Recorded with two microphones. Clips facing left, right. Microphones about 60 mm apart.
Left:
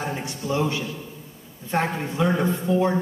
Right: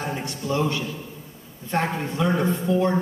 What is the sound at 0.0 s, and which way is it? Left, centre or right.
Speech, centre.